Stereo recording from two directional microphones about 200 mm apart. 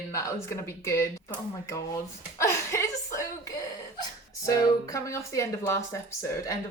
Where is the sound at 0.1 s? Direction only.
15° left (ahead or behind).